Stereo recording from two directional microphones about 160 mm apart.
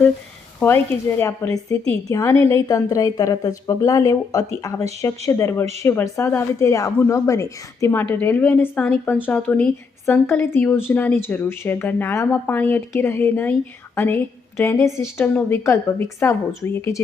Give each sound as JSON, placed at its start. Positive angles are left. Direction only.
{"t": 0.6, "sound": "speech", "side_deg": 5}
{"t": 1.2, "sound": "a woman's voice", "side_deg": 15}